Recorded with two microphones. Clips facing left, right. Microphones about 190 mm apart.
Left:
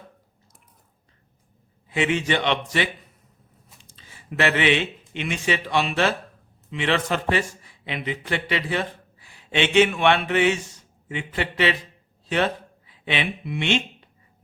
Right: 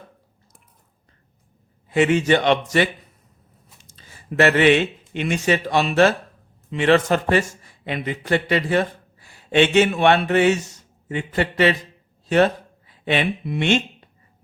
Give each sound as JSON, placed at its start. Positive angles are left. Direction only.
{"t": 1.9, "sound": "speech", "side_deg": -45}
{"t": 12.9, "sound": "speech", "side_deg": -45}